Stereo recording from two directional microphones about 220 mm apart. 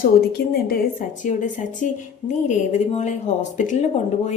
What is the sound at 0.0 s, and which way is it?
Speech, 45° left (ahead or behind).